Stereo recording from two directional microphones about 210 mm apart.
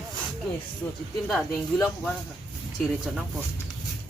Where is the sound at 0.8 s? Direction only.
15° left (ahead or behind).